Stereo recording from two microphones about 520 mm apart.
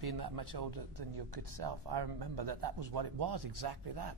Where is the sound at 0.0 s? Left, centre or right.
Right.